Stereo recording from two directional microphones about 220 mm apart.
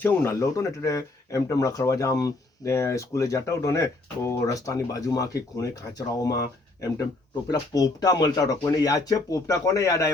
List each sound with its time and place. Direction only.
0.0 s speech: 10° left (ahead or behind)
7.7 s speech: 15° left (ahead or behind)